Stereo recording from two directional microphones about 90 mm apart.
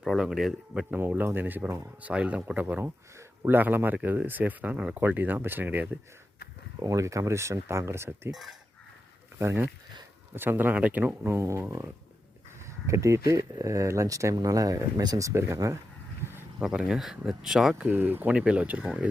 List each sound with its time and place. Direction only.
0.0 s speech: 5° right (ahead or behind)
0.9 s speech: 25° right (ahead or behind)
2.0 s speech: 15° right (ahead or behind)
6.8 s speech: 40° right (ahead or behind)
8.3 s speech: 5° right (ahead or behind)
9.4 s speech: 30° right (ahead or behind)
11.3 s speech: 30° right (ahead or behind)
16.6 s speech: 10° right (ahead or behind)
17.8 s speech: 20° right (ahead or behind)